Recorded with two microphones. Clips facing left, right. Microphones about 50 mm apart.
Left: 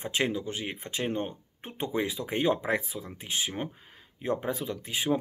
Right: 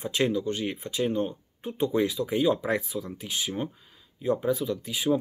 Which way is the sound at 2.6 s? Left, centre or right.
Left.